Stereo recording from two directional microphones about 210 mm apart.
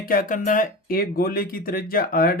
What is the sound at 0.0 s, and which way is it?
Speech, 45° left (ahead or behind).